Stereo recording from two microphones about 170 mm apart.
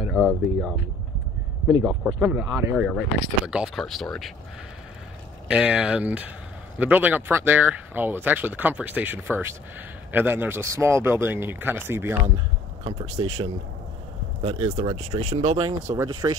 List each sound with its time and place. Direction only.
0.0 s speech: centre (ahead or behind)
2.1 s speech: 10° right (ahead or behind)
5.5 s speech: 5° right (ahead or behind)
12.8 s speech: 30° right (ahead or behind)
16.0 s speech: 20° right (ahead or behind)